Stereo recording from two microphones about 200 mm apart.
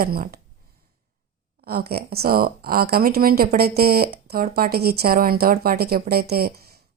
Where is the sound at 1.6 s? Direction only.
50° right (ahead or behind).